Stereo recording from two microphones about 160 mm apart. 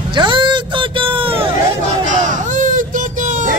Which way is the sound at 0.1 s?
30° right (ahead or behind).